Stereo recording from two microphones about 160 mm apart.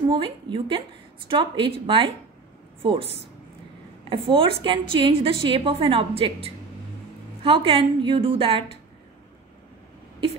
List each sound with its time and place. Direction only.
0.1 s a woman's voice: 35° right (ahead or behind)
4.1 s a woman's voice: 35° right (ahead or behind)